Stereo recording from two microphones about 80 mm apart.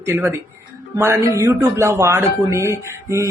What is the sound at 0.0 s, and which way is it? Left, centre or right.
Speech, right.